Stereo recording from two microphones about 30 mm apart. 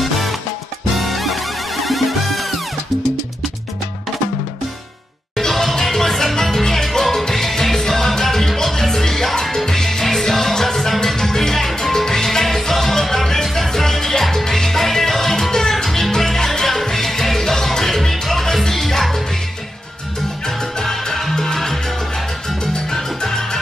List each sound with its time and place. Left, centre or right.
0.0 s salsa music: centre
0.9 s music: centre
5.4 s music: centre
11.1 s salsa music: centre
16.6 s music: centre
20.4 s salsa music: centre
22.8 s music: centre